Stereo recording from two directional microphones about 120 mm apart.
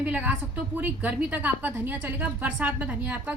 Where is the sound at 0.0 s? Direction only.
15° right (ahead or behind).